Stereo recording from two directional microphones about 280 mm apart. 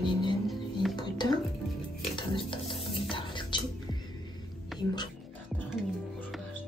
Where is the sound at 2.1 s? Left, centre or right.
Centre.